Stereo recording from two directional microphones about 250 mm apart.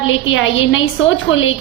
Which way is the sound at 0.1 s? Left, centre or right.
Left.